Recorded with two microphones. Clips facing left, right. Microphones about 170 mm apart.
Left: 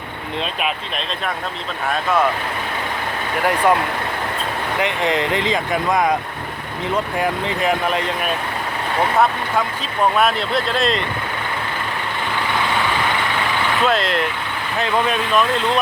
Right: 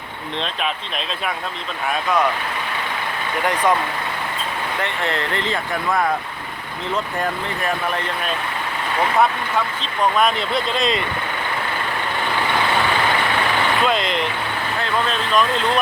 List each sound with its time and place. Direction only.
3.4 s speech: 10° left (ahead or behind)
4.8 s speech: 15° left (ahead or behind)
10.0 s speech: 5° left (ahead or behind)
13.8 s speech: centre (ahead or behind)
14.8 s speech: 15° left (ahead or behind)